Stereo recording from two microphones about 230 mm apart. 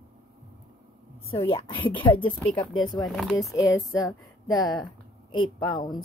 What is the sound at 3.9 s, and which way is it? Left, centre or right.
Speech, centre.